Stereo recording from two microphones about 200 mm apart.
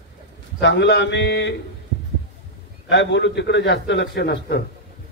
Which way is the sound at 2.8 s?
60° left (ahead or behind).